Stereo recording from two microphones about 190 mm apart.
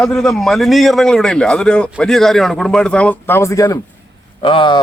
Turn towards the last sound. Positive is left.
turn(degrees=25)  # may be behind; listen again after turning